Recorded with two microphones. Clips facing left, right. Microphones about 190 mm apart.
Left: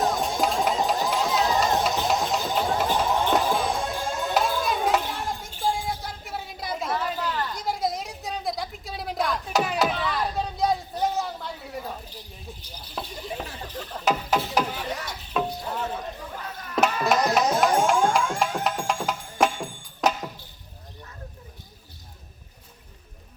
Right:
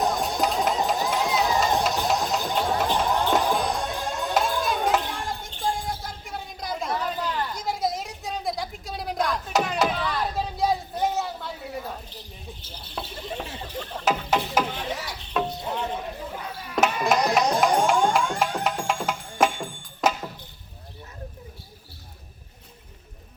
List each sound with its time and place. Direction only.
0.0 s music: centre (ahead or behind)
7.5 s a sound: centre (ahead or behind)
12.9 s a sound: centre (ahead or behind)
15.7 s chatter: 5° left (ahead or behind)
16.3 s chop: centre (ahead or behind)
17.1 s music: centre (ahead or behind)